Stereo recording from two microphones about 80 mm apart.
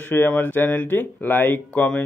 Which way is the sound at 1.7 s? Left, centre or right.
Centre.